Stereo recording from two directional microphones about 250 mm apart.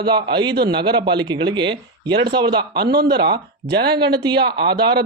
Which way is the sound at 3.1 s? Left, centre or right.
Centre.